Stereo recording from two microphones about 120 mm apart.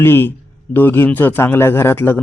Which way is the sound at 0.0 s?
20° left (ahead or behind).